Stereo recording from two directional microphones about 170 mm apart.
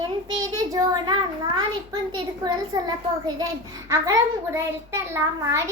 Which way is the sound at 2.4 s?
25° right (ahead or behind).